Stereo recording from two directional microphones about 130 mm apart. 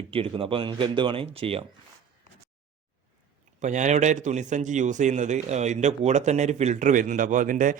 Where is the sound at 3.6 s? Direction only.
70° right (ahead or behind).